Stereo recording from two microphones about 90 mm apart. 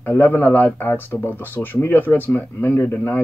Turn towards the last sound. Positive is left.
turn(degrees=20)  # may be behind; listen again after turning